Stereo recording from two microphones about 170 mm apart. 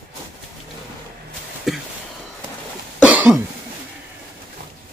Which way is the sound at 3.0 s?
5° right (ahead or behind).